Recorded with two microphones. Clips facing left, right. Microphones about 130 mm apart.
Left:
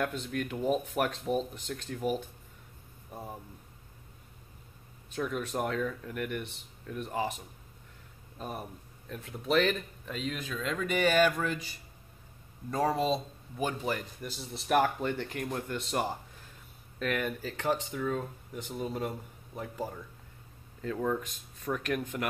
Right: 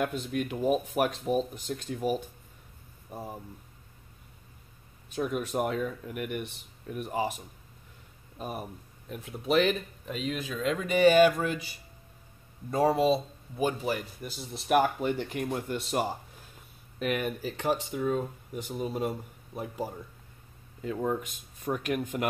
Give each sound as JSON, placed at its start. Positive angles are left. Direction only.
{"t": 0.3, "sound": "speech", "side_deg": -15}
{"t": 5.1, "sound": "speech", "side_deg": -15}
{"t": 12.9, "sound": "speech", "side_deg": -10}